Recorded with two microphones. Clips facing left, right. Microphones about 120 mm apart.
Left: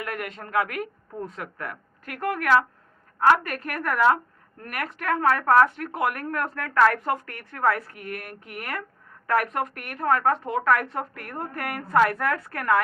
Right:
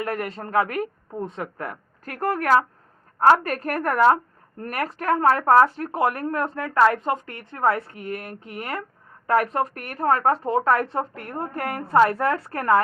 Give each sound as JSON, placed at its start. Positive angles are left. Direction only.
{"t": 0.0, "sound": "speech", "side_deg": -30}